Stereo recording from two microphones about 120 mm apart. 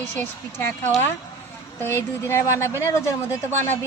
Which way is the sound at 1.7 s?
20° left (ahead or behind).